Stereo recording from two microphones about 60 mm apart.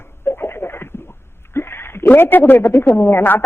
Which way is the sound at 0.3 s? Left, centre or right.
Left.